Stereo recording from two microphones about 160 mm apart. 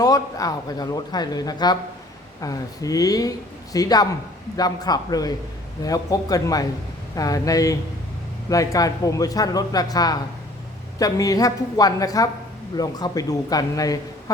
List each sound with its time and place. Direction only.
0.0 s speech: 20° left (ahead or behind)